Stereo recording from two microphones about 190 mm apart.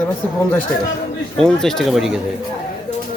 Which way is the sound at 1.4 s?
5° left (ahead or behind).